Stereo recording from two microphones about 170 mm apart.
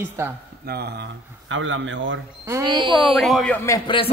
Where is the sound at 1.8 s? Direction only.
90° right.